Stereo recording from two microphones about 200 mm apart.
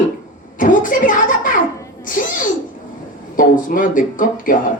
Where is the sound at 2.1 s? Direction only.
40° left (ahead or behind).